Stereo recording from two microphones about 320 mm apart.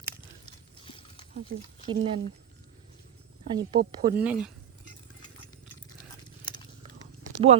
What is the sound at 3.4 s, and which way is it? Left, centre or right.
Speech, centre.